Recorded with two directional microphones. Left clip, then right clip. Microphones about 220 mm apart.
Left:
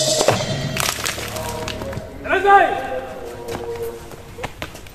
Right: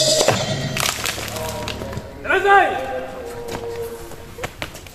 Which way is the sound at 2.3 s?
25° right (ahead or behind).